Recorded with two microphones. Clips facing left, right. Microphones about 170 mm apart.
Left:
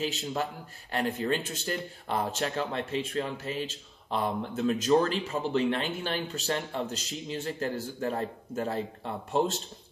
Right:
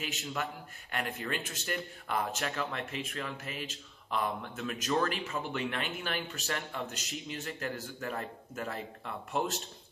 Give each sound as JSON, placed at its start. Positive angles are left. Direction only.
{"t": 0.0, "sound": "speech", "side_deg": 30}